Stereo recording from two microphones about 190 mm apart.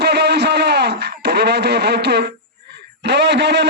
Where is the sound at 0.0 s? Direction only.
60° right (ahead or behind).